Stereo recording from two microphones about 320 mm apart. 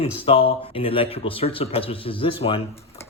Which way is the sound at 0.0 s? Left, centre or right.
Centre.